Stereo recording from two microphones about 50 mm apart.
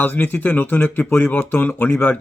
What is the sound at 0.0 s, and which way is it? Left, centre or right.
Speech, left.